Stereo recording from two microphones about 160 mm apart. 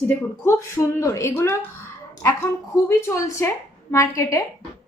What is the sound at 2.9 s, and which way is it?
A woman's voice, 15° left (ahead or behind).